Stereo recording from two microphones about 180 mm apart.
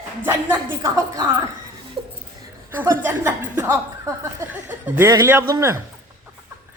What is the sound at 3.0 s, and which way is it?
Speech, 15° right (ahead or behind).